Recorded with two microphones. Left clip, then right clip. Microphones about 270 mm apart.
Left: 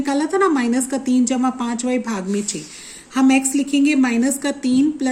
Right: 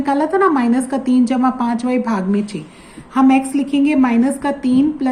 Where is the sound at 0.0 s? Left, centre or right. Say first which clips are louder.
Right 3 dB; left.